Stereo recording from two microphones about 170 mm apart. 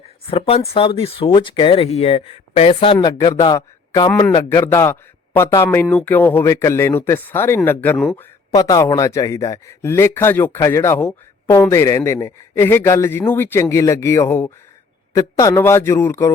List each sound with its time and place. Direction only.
0.3 s a man's voice: 35° left (ahead or behind)
4.4 s a man's voice: 15° left (ahead or behind)